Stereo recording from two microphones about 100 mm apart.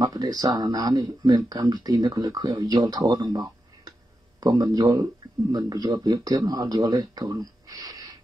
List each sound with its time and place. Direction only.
0.0 s speech: 40° right (ahead or behind)
3.3 s a sound: 40° right (ahead or behind)
4.4 s speech: 40° right (ahead or behind)
5.5 s a man's voice: 45° right (ahead or behind)